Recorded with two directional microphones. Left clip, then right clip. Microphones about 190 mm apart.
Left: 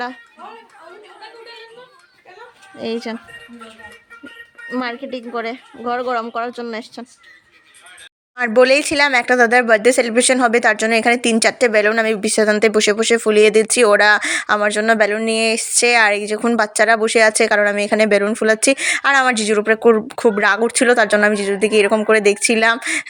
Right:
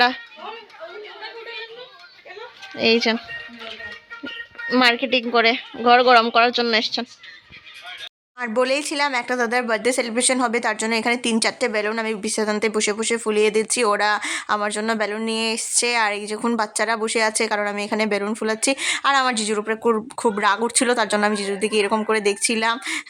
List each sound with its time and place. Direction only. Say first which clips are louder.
2.7 s speech: right 7 dB; centre (ahead or behind)
4.7 s speech: right 7 dB; 5° right (ahead or behind)
8.4 s speech: left 8 dB; 20° left (ahead or behind)